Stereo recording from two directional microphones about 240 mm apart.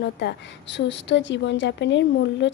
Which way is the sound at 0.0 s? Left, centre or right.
Left.